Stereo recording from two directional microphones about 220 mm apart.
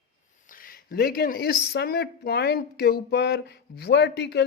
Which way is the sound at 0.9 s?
45° left (ahead or behind).